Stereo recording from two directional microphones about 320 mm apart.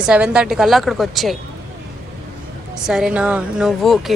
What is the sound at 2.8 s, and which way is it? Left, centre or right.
Speech, centre.